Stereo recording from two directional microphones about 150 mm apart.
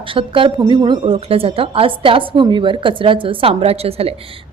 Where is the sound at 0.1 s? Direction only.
35° right (ahead or behind).